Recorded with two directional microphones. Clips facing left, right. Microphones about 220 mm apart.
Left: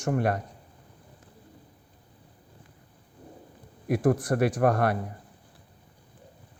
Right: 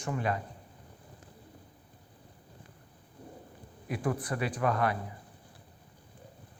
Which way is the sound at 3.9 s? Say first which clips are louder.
Left 9 dB; 45° left (ahead or behind).